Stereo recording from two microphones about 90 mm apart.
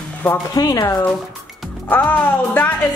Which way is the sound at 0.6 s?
35° left (ahead or behind).